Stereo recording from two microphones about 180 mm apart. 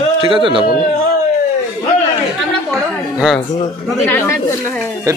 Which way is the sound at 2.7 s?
Centre (ahead or behind).